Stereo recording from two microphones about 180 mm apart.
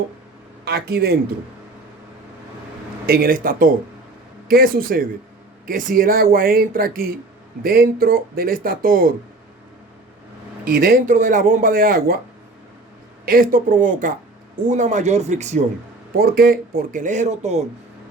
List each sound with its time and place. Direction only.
0.6 s speech: 65° right (ahead or behind)
3.1 s speech: 55° right (ahead or behind)
10.7 s speech: 55° right (ahead or behind)
13.2 s speech: 50° right (ahead or behind)
16.1 s speech: 55° right (ahead or behind); by 17.6 s 40° right (ahead or behind)